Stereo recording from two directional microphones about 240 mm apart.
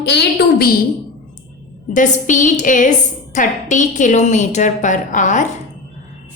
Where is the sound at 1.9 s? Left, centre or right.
Left.